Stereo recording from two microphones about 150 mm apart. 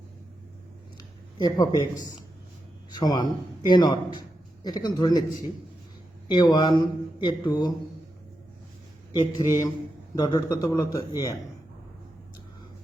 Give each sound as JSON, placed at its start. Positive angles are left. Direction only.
{"t": 1.4, "sound": "speech", "side_deg": 25}
{"t": 2.9, "sound": "speech", "side_deg": 25}
{"t": 9.3, "sound": "speech", "side_deg": 25}